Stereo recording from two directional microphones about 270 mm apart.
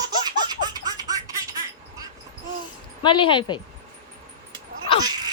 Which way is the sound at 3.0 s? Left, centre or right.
Centre.